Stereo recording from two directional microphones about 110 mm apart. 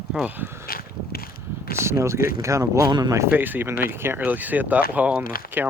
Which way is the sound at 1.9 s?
25° right (ahead or behind).